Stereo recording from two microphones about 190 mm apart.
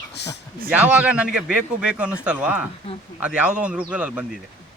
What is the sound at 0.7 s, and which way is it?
Speech, 5° right (ahead or behind).